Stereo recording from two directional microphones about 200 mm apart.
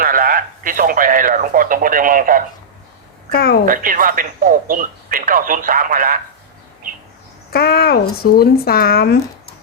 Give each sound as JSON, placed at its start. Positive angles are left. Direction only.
{"t": 0.0, "sound": "a sound", "side_deg": -45}
{"t": 3.3, "sound": "speech", "side_deg": 50}
{"t": 3.7, "sound": "speech", "side_deg": -45}
{"t": 7.5, "sound": "speech", "side_deg": 50}